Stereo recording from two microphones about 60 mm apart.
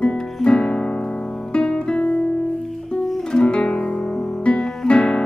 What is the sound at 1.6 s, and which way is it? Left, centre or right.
Guitar, centre.